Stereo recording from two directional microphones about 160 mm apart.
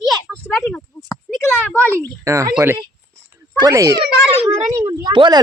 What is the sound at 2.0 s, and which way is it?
Speech, 20° right (ahead or behind).